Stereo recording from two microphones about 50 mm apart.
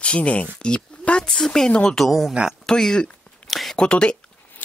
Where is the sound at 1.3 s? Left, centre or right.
Centre.